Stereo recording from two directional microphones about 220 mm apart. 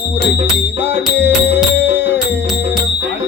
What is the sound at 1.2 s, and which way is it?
Music, 10° right (ahead or behind).